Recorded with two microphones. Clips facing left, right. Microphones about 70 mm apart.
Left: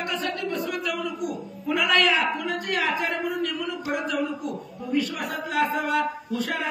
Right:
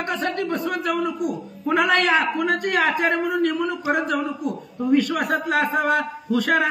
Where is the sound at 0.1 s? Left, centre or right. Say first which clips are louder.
Right 7 dB; right.